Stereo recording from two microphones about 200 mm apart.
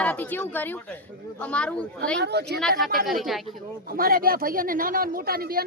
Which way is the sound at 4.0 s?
45° right (ahead or behind).